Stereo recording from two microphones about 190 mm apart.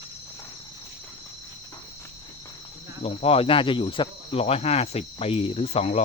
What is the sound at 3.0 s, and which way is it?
Speech, 30° left (ahead or behind).